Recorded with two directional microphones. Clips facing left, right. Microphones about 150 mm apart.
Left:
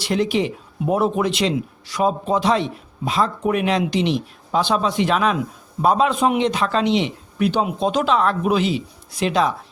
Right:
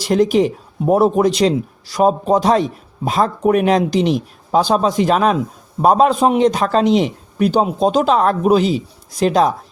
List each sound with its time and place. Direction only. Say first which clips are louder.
0.0 s a man's voice: right 6 dB; 40° right (ahead or behind)